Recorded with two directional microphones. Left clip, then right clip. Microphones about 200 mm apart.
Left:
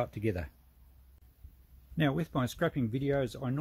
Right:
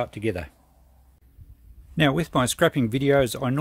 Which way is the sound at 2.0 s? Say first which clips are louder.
Right 10 dB; 35° right (ahead or behind).